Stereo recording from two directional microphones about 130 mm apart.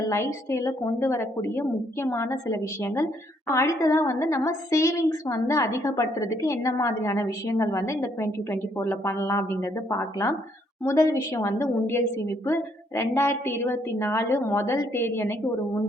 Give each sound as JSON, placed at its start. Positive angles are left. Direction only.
{"t": 0.1, "sound": "a woman's voice", "side_deg": 20}